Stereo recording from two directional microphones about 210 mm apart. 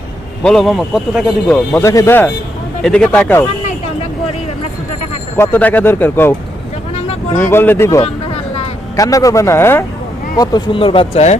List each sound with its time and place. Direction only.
0.4 s a man's voice: centre (ahead or behind)
1.8 s a man's voice: 15° left (ahead or behind)
5.4 s speech: 10° left (ahead or behind)
7.3 s speech: 10° left (ahead or behind); by 11.3 s 30° left (ahead or behind)